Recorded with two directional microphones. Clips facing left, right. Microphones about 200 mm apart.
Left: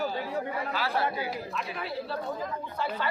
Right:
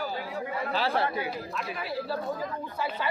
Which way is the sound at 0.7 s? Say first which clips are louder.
Right 3 dB; 30° right (ahead or behind).